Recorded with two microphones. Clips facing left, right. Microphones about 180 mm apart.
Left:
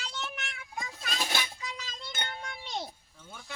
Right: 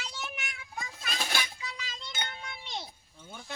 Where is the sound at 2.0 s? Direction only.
45° left (ahead or behind).